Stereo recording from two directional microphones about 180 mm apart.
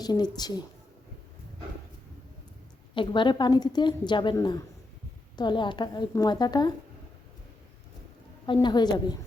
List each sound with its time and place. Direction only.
0.0 s a woman's voice: 25° left (ahead or behind)
2.9 s a woman's voice: 25° left (ahead or behind)
8.4 s a woman's voice: 25° left (ahead or behind)